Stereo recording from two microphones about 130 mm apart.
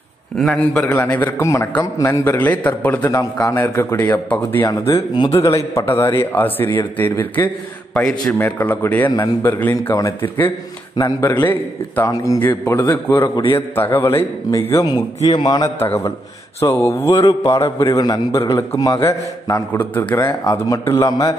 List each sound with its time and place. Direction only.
0.4 s a man's voice: 5° left (ahead or behind)
3.1 s a man's voice: 25° left (ahead or behind)
11.0 s a man's voice: 30° left (ahead or behind)
11.3 s a man's voice: 15° left (ahead or behind); by 15.7 s 35° left (ahead or behind)
15.8 s a man's voice: 20° left (ahead or behind)